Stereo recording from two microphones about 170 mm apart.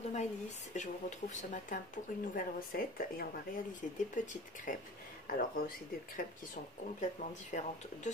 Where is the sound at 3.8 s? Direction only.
45° left (ahead or behind).